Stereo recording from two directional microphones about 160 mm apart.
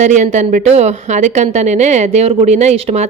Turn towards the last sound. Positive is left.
turn(degrees=-40)  # may be behind; listen again after turning